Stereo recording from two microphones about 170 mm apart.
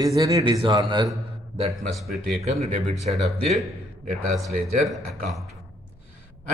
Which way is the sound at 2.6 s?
40° right (ahead or behind).